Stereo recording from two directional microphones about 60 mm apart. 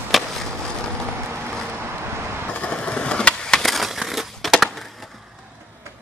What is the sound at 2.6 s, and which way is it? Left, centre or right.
Skateboard, left.